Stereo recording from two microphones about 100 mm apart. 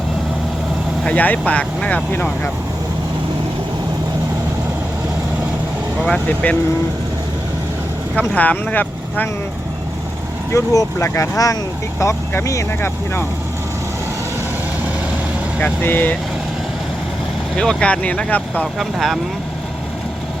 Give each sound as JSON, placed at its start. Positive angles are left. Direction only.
{"t": 1.0, "sound": "speech", "side_deg": 15}
{"t": 6.2, "sound": "speech", "side_deg": 15}
{"t": 8.4, "sound": "speech", "side_deg": 15}
{"t": 10.5, "sound": "speech", "side_deg": 35}
{"t": 15.6, "sound": "speech", "side_deg": 20}
{"t": 17.6, "sound": "speech", "side_deg": 10}
{"t": 18.8, "sound": "speech", "side_deg": 0}